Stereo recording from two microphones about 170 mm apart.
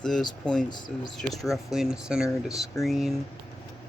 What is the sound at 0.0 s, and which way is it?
Speech, 5° left (ahead or behind).